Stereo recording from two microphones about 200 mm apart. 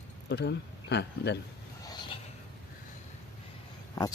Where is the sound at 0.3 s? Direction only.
60° left (ahead or behind).